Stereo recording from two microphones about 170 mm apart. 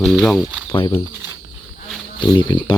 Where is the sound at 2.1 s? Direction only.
25° left (ahead or behind).